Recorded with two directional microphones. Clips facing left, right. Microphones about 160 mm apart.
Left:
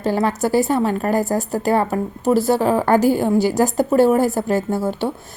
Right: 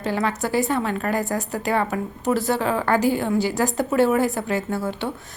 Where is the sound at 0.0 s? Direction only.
40° left (ahead or behind).